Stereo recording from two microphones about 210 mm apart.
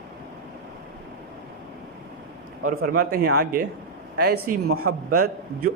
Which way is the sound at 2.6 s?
40° right (ahead or behind).